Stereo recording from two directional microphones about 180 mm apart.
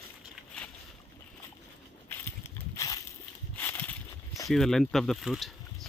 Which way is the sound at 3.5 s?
10° left (ahead or behind).